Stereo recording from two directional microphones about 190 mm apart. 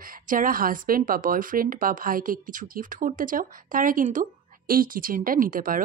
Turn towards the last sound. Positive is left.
turn(degrees=-45)  # may be behind; listen again after turning